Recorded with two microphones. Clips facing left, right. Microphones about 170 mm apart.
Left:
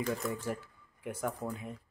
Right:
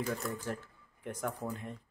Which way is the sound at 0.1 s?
5° left (ahead or behind).